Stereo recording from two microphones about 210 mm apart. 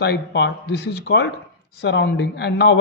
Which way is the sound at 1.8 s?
55° left (ahead or behind).